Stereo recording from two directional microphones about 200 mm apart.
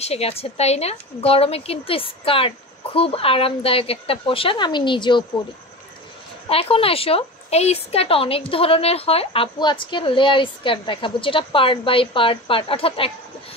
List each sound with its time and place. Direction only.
0.0 s a woman's voice: 30° left (ahead or behind)
6.5 s a woman's voice: 30° left (ahead or behind)